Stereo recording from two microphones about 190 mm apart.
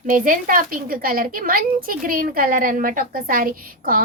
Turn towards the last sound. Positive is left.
turn(degrees=-50)  # may be behind; listen again after turning